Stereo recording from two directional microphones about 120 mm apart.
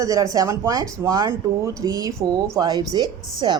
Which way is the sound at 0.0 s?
30° right (ahead or behind).